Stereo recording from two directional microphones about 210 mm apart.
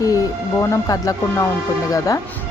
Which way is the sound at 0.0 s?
15° left (ahead or behind).